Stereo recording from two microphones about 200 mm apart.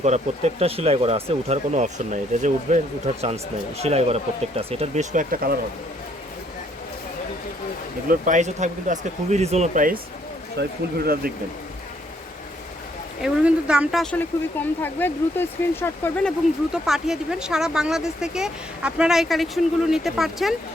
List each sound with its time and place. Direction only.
0.0 s speech: 35° right (ahead or behind)
8.0 s speech: 40° right (ahead or behind)
13.2 s speech: 5° right (ahead or behind)
16.7 s speech: centre (ahead or behind)